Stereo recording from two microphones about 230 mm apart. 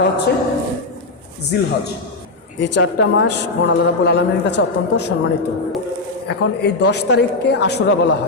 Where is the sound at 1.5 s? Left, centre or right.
Left.